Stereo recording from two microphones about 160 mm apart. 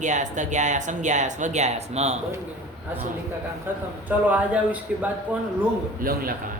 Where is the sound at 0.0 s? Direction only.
50° right (ahead or behind).